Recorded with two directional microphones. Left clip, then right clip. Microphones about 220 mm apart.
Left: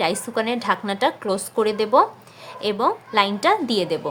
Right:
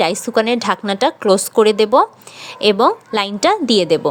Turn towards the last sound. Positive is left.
turn(degrees=-30)  # may be behind; listen again after turning